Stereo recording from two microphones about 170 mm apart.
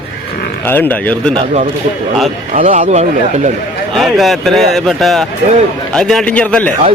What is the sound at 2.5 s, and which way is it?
Speech, 45° right (ahead or behind).